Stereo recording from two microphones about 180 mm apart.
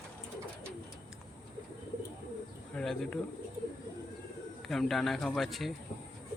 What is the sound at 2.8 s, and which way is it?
Speech, 5° left (ahead or behind).